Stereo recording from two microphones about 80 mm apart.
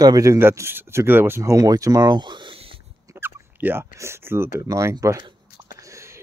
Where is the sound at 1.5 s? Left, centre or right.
Right.